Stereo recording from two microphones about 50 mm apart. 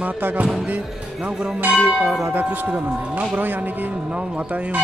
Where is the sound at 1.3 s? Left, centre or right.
Centre.